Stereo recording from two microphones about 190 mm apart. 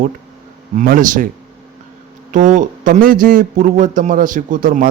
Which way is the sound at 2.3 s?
40° right (ahead or behind).